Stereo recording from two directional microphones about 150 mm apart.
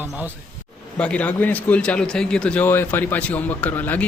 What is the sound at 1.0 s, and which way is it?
A man's voice, 10° left (ahead or behind).